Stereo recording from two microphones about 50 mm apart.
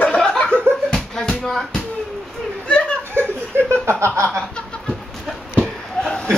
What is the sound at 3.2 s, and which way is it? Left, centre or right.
Chuckle, right.